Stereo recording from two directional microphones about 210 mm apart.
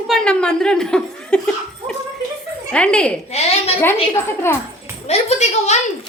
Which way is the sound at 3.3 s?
30° left (ahead or behind).